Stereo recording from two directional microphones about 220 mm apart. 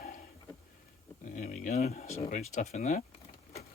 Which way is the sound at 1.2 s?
35° left (ahead or behind).